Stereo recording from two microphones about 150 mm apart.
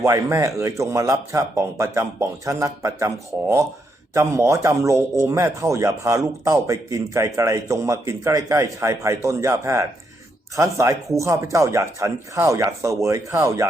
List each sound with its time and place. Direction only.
0.0 s speech: 20° right (ahead or behind)
4.1 s speech: 20° right (ahead or behind)